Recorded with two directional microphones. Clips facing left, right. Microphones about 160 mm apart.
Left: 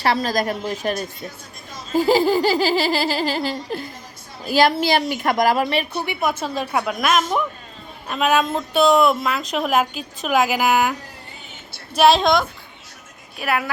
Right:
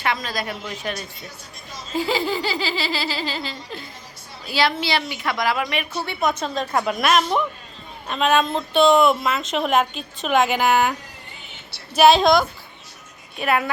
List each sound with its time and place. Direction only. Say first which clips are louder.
0.0 s a woman's voice: left 6 dB; 35° left (ahead or behind)
1.9 s laughter: left 7 dB; 45° left (ahead or behind)
6.1 s a woman's voice: right 1 dB; 5° left (ahead or behind)
11.9 s a woman's voice: right 1 dB; centre (ahead or behind)